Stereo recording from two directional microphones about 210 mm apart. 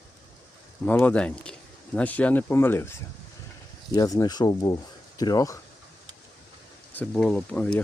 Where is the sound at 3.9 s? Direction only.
15° left (ahead or behind).